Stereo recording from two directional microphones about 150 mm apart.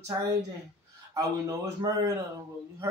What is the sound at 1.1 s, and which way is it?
Speech, 20° right (ahead or behind).